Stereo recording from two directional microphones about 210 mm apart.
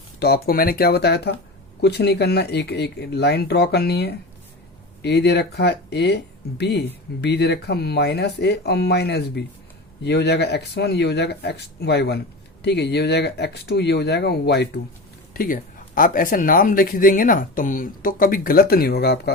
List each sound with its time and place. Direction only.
0.2 s speech: 50° left (ahead or behind)
15.3 s speech: 40° left (ahead or behind)